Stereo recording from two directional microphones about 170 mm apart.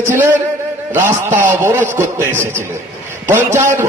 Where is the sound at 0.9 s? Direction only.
15° right (ahead or behind).